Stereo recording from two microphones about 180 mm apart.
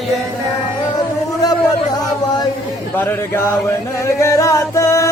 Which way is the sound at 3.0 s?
10° left (ahead or behind).